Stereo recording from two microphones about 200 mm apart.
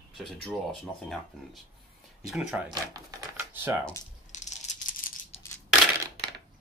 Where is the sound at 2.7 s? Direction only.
20° right (ahead or behind).